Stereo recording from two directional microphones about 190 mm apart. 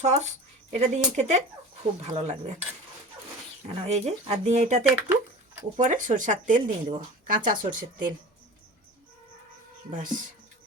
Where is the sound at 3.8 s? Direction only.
35° right (ahead or behind).